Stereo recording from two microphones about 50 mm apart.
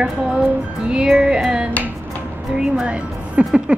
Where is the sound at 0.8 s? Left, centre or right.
Centre.